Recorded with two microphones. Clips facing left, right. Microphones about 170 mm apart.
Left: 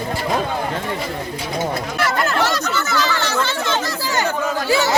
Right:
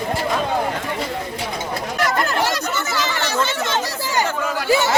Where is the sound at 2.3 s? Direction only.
10° right (ahead or behind).